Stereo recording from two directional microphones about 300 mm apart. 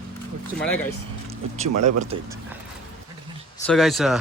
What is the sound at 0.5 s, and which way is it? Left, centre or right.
Speech, centre.